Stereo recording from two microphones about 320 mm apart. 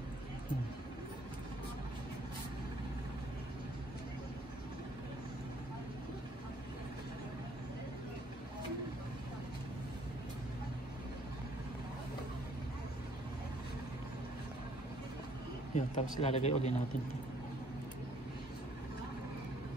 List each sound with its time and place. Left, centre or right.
15.7 s speech: centre